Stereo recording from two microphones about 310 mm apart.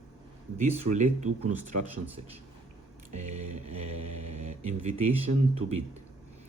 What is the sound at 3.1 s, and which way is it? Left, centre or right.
Speech, right.